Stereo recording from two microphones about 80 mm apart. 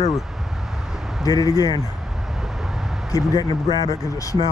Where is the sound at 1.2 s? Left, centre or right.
Left.